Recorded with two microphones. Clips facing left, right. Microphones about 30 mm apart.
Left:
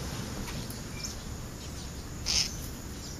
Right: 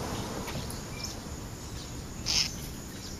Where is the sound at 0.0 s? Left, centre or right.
Right.